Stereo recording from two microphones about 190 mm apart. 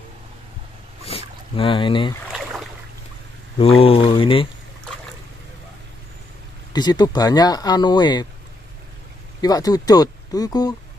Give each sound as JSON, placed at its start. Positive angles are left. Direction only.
{"t": 1.0, "sound": "boat", "side_deg": 30}
{"t": 3.7, "sound": "speech", "side_deg": 30}
{"t": 6.7, "sound": "speech", "side_deg": 20}
{"t": 9.4, "sound": "speech", "side_deg": 20}